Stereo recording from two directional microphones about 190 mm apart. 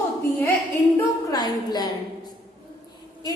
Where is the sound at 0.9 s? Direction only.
20° left (ahead or behind).